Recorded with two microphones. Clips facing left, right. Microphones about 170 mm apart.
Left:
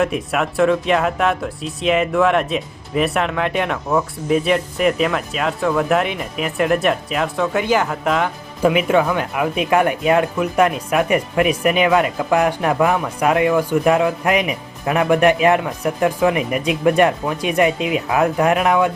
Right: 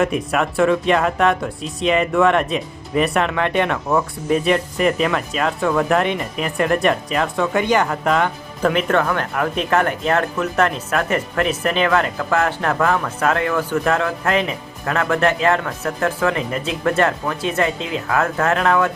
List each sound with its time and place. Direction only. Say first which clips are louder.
0.0 s speech: even; centre (ahead or behind)